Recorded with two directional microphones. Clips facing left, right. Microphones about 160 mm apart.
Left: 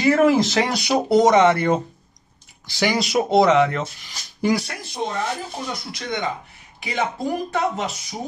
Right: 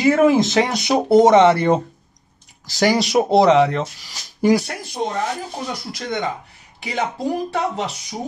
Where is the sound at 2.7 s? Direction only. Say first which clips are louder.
Right 4 dB; 40° right (ahead or behind).